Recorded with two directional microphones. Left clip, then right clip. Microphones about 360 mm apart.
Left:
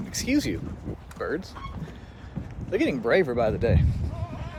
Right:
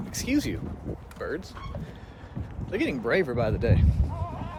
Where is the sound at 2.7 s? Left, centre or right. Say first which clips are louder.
Left 3 dB; centre.